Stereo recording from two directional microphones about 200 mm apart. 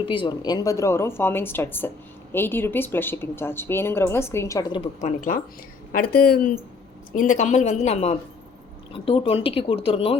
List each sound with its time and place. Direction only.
0.0 s a woman's voice: 25° left (ahead or behind)
4.8 s a woman's voice: 35° left (ahead or behind)